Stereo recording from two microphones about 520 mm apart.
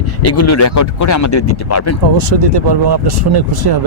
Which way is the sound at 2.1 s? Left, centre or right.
Right.